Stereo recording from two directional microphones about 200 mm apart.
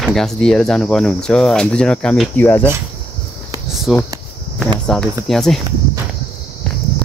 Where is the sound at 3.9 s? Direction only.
Centre (ahead or behind).